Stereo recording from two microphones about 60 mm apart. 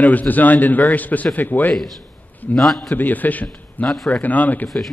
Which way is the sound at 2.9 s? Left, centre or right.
Left.